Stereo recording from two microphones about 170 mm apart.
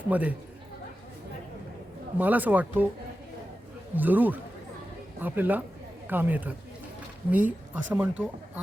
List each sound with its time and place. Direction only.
0.1 s speech: 10° right (ahead or behind)
2.1 s speech: 10° right (ahead or behind)
3.9 s speech: 10° right (ahead or behind)